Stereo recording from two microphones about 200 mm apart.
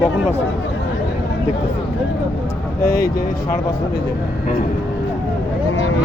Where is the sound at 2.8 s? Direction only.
50° left (ahead or behind).